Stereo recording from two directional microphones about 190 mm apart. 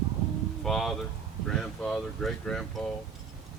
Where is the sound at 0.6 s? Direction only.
Centre (ahead or behind).